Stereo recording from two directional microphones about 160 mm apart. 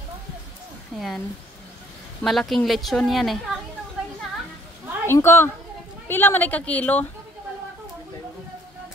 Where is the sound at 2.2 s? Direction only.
Centre (ahead or behind).